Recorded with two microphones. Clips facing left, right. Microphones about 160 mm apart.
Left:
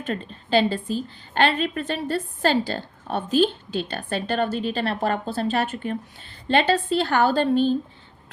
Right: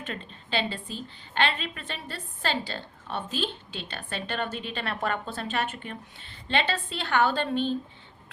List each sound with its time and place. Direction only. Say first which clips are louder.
0.0 s a woman's voice: left 8 dB; 40° left (ahead or behind)